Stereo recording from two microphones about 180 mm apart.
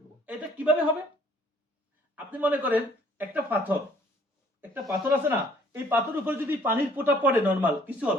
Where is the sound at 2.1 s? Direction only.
10° right (ahead or behind).